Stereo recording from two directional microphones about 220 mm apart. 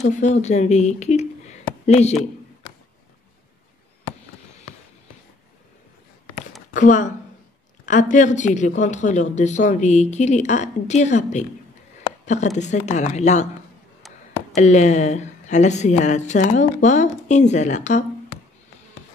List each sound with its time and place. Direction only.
0.0 s speech: 30° left (ahead or behind)
6.7 s a woman's voice: 35° left (ahead or behind)
14.5 s speech: 30° left (ahead or behind)